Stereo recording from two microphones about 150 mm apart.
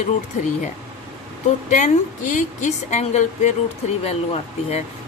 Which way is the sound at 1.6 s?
55° left (ahead or behind).